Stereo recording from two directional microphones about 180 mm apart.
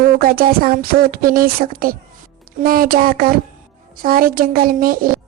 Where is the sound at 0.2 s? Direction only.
55° right (ahead or behind).